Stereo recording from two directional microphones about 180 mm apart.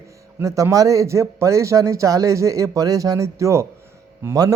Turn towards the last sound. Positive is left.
turn(degrees=-15)  # may be behind; listen again after turning